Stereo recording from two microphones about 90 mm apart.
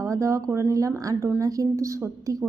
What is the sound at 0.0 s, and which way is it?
A woman's voice, 35° right (ahead or behind).